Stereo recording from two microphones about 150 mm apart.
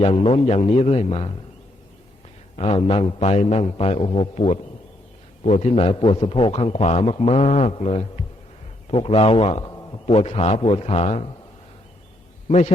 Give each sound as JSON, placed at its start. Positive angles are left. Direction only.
{"t": 0.0, "sound": "a man's voice", "side_deg": 40}
{"t": 2.6, "sound": "a man's voice", "side_deg": 40}
{"t": 12.5, "sound": "a man's voice", "side_deg": 50}